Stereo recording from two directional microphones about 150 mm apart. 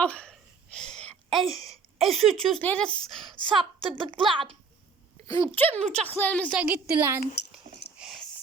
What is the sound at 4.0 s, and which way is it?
Speech, 35° right (ahead or behind).